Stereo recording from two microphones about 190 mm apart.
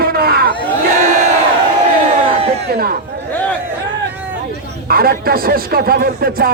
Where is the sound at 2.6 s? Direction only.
55° right (ahead or behind).